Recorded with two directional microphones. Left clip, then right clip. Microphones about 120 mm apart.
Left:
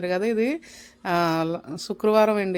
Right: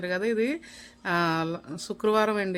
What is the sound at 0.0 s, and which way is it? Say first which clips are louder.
Speech: left 3 dB; 30° left (ahead or behind).